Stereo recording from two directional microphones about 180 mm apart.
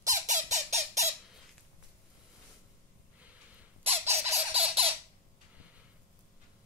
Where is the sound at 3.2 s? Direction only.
10° right (ahead or behind).